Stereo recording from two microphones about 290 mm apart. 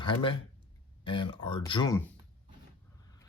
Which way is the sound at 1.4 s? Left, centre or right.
Left.